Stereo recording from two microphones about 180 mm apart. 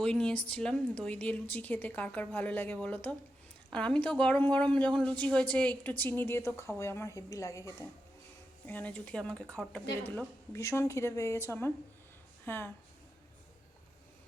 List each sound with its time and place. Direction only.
0.0 s a woman's voice: 5° left (ahead or behind)